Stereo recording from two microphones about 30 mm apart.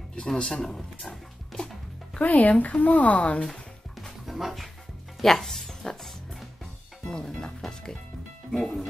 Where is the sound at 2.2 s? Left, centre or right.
Left.